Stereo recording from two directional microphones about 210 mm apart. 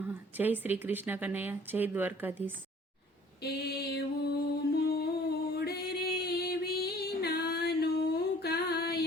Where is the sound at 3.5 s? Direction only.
50° left (ahead or behind).